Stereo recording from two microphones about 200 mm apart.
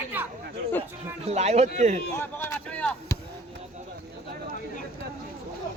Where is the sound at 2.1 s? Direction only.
10° left (ahead or behind).